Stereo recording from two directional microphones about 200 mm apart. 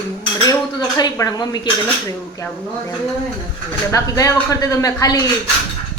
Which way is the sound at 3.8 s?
15° left (ahead or behind).